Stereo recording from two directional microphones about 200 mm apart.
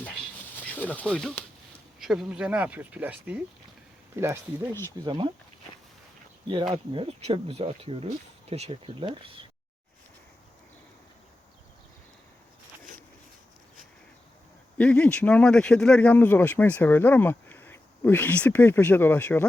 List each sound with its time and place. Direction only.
0.6 s speech: 10° left (ahead or behind); by 4.4 s 10° right (ahead or behind)
5.0 s speech: 25° right (ahead or behind)
6.9 s speech: 25° right (ahead or behind)
14.8 s speech: 5° left (ahead or behind)